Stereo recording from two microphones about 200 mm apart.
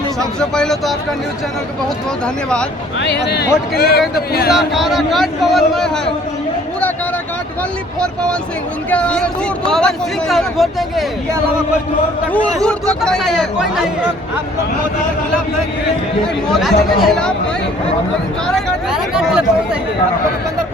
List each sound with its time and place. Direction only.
0.2 s speech: 5° left (ahead or behind)
2.2 s speech: 5° left (ahead or behind)
3.0 s speech: 55° left (ahead or behind)
4.5 s speech: centre (ahead or behind)
8.9 s speech: 5° left (ahead or behind)
12.3 s a man's voice: 5° left (ahead or behind)
16.2 s speech: centre (ahead or behind)
19.1 s speech: 5° right (ahead or behind)